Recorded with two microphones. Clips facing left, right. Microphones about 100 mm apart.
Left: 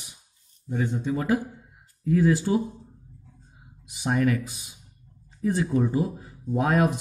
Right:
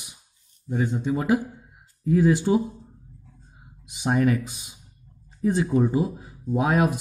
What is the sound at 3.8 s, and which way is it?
Speech, 25° right (ahead or behind).